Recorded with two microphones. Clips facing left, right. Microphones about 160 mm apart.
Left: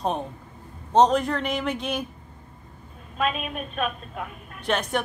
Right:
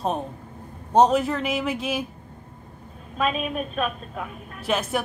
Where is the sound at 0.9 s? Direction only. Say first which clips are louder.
Right 1 dB; 5° right (ahead or behind).